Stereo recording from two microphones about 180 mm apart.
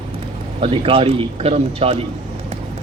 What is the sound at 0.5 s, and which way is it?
A man's voice, 30° right (ahead or behind).